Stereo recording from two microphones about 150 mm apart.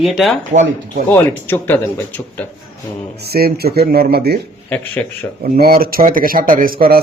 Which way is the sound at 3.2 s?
90° right.